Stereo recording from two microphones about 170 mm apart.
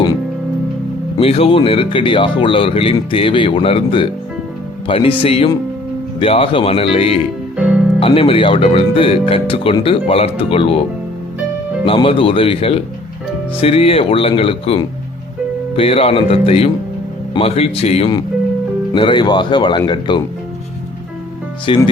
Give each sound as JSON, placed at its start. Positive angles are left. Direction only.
{"t": 1.2, "sound": "speech", "side_deg": 35}
{"t": 7.5, "sound": "music", "side_deg": -5}
{"t": 7.9, "sound": "speech", "side_deg": 35}
{"t": 11.9, "sound": "speech", "side_deg": 30}
{"t": 21.7, "sound": "speech", "side_deg": 30}